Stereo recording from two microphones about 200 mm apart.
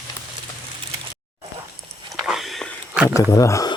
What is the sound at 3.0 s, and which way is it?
Speech, 15° left (ahead or behind).